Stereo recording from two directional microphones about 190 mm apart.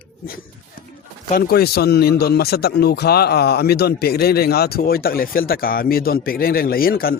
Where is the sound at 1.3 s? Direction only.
55° left (ahead or behind).